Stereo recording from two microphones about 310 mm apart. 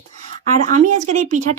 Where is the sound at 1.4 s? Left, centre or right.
Right.